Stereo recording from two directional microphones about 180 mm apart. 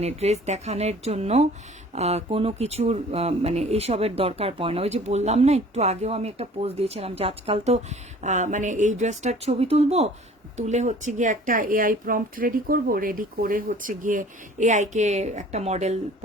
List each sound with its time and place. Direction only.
0.0 s speech: 35° right (ahead or behind)